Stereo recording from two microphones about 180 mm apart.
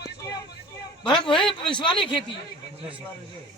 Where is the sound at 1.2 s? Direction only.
30° left (ahead or behind).